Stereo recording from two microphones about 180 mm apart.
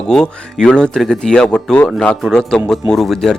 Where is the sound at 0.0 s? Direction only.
5° left (ahead or behind).